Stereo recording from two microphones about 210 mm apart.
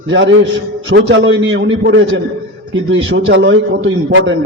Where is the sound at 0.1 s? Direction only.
65° right (ahead or behind).